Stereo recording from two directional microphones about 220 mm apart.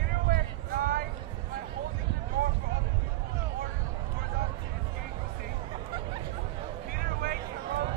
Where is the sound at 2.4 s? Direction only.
45° right (ahead or behind).